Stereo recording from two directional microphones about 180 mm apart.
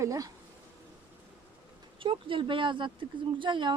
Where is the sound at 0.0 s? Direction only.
20° right (ahead or behind).